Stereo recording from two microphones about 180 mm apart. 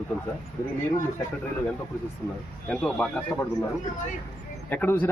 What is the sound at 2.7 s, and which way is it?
Speech, centre (ahead or behind).